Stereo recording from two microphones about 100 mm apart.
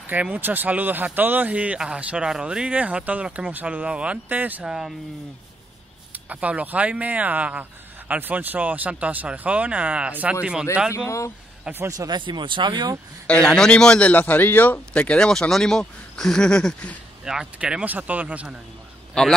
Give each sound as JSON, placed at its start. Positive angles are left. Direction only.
{"t": 0.0, "sound": "speech", "side_deg": -15}
{"t": 4.6, "sound": "speech", "side_deg": -5}
{"t": 6.1, "sound": "speech", "side_deg": -15}
{"t": 10.9, "sound": "speech", "side_deg": 30}
{"t": 11.7, "sound": "speech", "side_deg": -10}
{"t": 12.1, "sound": "speech", "side_deg": -50}
{"t": 13.3, "sound": "a man's voice", "side_deg": 5}
{"t": 17.2, "sound": "speech", "side_deg": -5}
{"t": 19.2, "sound": "a man's voice", "side_deg": 5}